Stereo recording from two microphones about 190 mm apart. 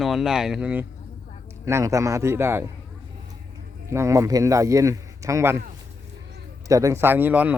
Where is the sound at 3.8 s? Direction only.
15° right (ahead or behind).